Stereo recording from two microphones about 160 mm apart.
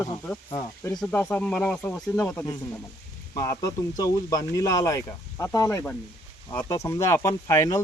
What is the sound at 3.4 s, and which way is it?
Speech, 20° left (ahead or behind).